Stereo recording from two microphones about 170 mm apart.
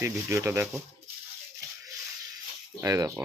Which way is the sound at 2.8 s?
20° right (ahead or behind).